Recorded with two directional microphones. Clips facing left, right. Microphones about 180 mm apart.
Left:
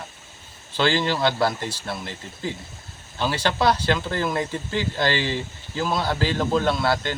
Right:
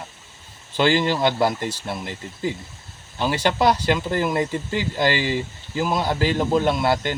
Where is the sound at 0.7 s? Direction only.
15° right (ahead or behind).